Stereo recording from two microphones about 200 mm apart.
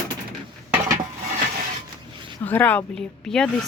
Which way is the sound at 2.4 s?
10° left (ahead or behind).